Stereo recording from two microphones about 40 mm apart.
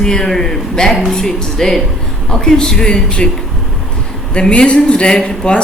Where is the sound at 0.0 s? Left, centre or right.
Centre.